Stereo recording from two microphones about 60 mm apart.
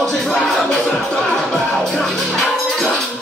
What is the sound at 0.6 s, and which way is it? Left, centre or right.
Music, centre.